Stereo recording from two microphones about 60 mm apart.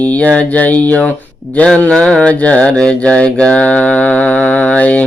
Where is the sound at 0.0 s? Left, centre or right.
Left.